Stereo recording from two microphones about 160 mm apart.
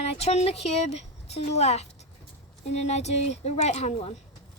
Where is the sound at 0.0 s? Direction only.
40° left (ahead or behind).